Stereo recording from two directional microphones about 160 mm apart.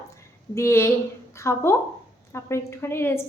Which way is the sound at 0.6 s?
15° left (ahead or behind).